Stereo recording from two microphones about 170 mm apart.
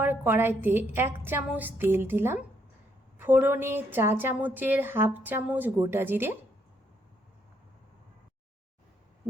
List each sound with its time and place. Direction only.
0.0 s a woman's voice: 10° right (ahead or behind)